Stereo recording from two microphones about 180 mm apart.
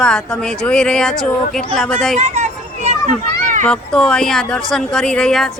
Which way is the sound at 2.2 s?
40° right (ahead or behind).